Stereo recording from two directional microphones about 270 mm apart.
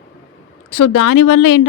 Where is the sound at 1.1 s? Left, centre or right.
Left.